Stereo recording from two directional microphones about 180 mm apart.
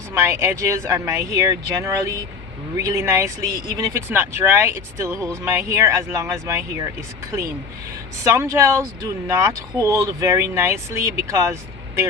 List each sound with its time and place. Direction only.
0.1 s speech: 15° right (ahead or behind)
8.2 s speech: 15° right (ahead or behind)